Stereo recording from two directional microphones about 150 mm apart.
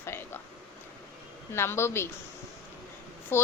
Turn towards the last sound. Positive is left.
turn(degrees=15)  # may be behind; listen again after turning